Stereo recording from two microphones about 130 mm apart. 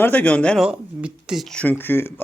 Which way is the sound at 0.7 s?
5° right (ahead or behind).